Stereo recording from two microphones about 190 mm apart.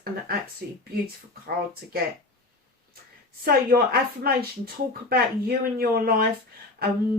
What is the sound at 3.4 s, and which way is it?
Speech, 55° right (ahead or behind).